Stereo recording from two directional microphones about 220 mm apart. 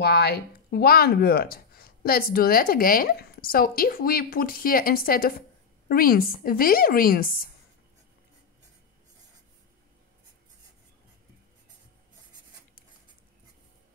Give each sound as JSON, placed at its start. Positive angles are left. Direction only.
{"t": 0.0, "sound": "speech", "side_deg": 45}